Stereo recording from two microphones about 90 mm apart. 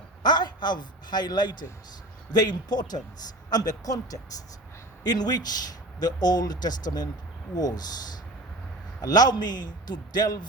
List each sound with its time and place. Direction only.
0.2 s a man's voice: 55° left (ahead or behind)